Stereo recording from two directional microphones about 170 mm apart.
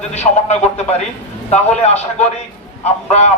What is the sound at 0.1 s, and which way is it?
A man's voice, 40° left (ahead or behind).